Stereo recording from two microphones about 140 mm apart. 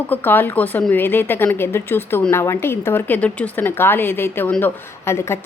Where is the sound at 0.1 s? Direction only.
15° left (ahead or behind).